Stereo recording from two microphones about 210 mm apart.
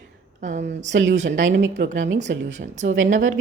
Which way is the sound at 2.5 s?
35° right (ahead or behind).